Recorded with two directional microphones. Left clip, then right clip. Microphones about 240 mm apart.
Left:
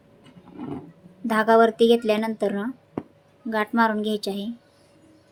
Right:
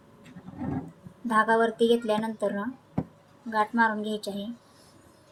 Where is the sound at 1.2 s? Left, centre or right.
Left.